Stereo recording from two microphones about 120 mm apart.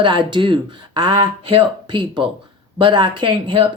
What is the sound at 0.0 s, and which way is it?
Speech, 40° right (ahead or behind).